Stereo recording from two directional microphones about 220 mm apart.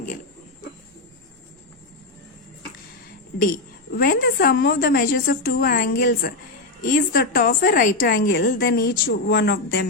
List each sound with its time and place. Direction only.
3.9 s a woman's voice: 40° left (ahead or behind)